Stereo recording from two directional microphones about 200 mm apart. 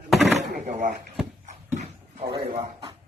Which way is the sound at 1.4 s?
35° right (ahead or behind).